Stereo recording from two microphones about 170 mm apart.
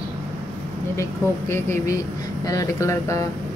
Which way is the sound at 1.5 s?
15° left (ahead or behind).